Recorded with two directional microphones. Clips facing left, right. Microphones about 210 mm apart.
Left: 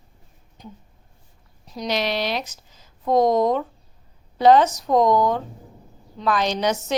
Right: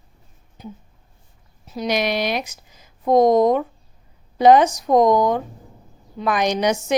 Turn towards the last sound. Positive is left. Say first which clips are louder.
# right 3 dB
turn(degrees=-15)  # may be behind; listen again after turning